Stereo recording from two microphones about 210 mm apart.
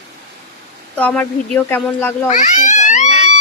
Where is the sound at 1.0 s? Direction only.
5° left (ahead or behind).